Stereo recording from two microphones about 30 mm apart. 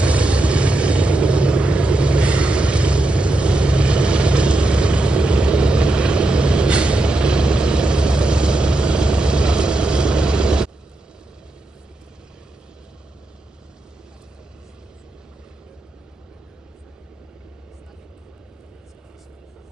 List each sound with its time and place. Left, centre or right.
0.0 s vehicle: right